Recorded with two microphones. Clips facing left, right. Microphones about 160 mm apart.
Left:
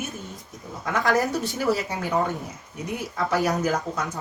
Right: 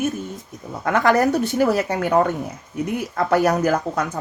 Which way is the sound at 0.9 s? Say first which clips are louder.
Right 6 dB; 65° right (ahead or behind).